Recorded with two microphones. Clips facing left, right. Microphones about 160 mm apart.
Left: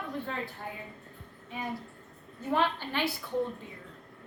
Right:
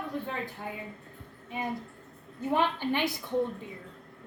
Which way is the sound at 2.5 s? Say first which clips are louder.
Right 2 dB; 15° right (ahead or behind).